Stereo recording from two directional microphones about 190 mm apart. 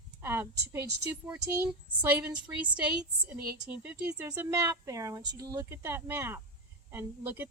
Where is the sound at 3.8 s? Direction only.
10° right (ahead or behind).